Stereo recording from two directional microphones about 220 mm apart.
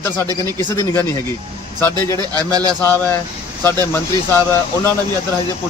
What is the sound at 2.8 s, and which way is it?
Speech, 10° left (ahead or behind).